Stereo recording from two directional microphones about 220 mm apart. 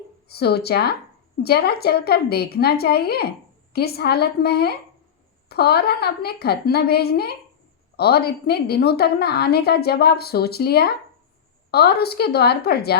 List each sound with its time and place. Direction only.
0.3 s a woman's voice: 45° left (ahead or behind)